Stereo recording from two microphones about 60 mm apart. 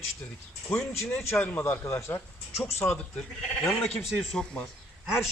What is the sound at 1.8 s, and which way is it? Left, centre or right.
Speech, left.